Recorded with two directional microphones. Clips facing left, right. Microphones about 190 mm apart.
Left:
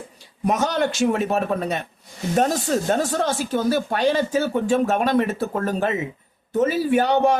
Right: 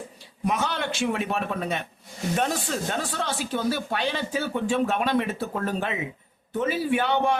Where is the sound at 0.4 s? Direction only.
45° left (ahead or behind).